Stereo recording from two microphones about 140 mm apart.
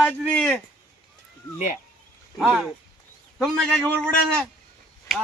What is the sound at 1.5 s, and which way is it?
Speech, 65° left (ahead or behind).